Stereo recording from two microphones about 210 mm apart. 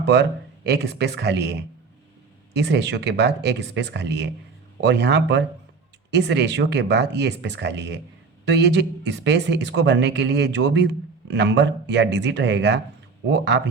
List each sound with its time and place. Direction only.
0.0 s speech: 55° right (ahead or behind)